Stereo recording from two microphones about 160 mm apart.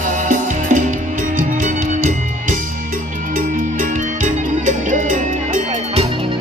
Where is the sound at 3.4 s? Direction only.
55° right (ahead or behind).